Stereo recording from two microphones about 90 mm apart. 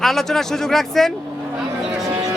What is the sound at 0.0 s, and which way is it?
A man's voice, 5° left (ahead or behind).